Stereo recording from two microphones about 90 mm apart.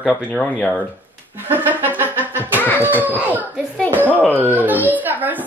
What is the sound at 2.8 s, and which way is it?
Speech, 20° right (ahead or behind).